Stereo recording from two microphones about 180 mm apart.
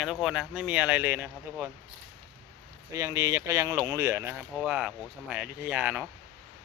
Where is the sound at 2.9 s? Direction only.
15° right (ahead or behind).